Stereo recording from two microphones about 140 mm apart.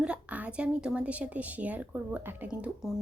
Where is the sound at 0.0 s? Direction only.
10° right (ahead or behind).